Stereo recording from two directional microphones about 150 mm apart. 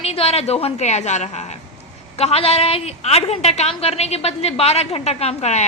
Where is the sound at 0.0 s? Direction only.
40° left (ahead or behind).